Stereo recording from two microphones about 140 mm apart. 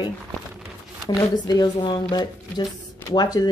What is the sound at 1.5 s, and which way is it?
Speech, 30° left (ahead or behind).